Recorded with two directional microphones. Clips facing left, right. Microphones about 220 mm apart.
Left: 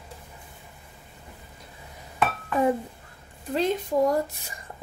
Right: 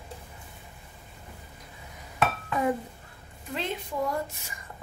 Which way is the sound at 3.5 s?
40° left (ahead or behind).